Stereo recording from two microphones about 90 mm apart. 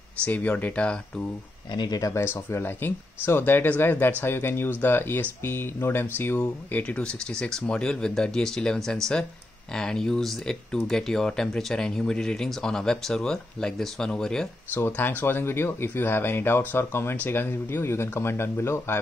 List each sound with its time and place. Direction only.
0.2 s speech: 15° left (ahead or behind)
1.7 s speech: 55° left (ahead or behind)
2.1 s speech: 25° left (ahead or behind); by 14.5 s 5° left (ahead or behind)
14.9 s speech: 20° left (ahead or behind)